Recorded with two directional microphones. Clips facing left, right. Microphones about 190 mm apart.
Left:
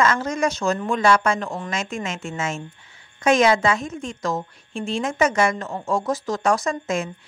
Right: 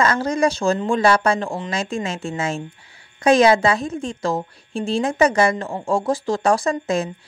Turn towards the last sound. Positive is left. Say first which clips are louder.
# right 3 dB
turn(degrees=-35)  # may be behind; listen again after turning